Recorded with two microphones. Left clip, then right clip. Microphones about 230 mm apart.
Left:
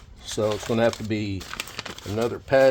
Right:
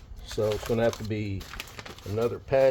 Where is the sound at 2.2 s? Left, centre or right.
Left.